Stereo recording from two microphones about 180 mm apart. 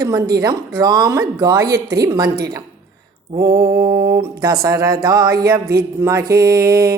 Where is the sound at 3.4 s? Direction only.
25° right (ahead or behind).